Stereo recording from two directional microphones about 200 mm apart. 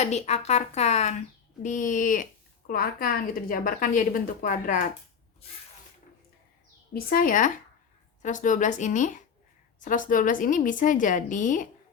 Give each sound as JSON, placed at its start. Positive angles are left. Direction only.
{"t": 0.0, "sound": "a woman's voice", "side_deg": 35}
{"t": 6.9, "sound": "a woman's voice", "side_deg": 45}